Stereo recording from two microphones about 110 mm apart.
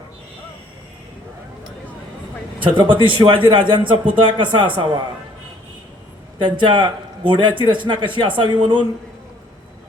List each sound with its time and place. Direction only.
2.7 s a man's voice: 50° right (ahead or behind)
6.4 s a man's voice: 45° right (ahead or behind)